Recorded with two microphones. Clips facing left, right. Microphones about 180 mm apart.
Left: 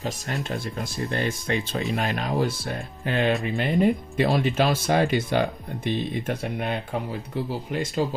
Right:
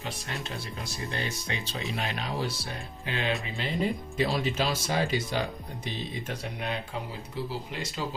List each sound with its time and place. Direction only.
0.0 s speech: 45° left (ahead or behind)